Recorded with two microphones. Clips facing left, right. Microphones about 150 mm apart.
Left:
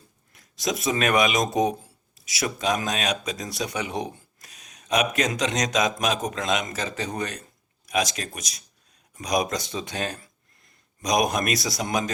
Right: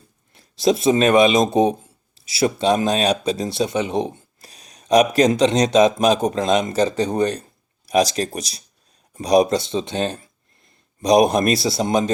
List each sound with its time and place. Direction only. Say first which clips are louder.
0.3 s speech: right 10 dB; 30° right (ahead or behind)